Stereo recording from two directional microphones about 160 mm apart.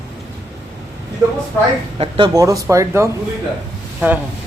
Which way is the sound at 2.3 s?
20° right (ahead or behind).